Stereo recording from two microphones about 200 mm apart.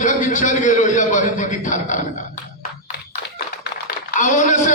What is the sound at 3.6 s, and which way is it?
Typing, 45° left (ahead or behind).